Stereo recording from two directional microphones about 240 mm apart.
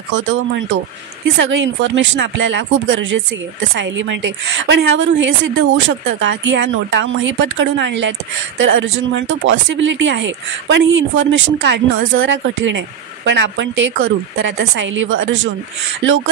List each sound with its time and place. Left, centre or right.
0.1 s speech: right